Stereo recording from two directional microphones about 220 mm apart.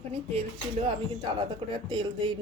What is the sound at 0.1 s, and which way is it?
A woman's voice, 25° right (ahead or behind).